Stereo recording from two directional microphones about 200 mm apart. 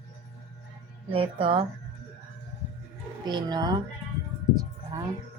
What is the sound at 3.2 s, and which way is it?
Music, 20° right (ahead or behind).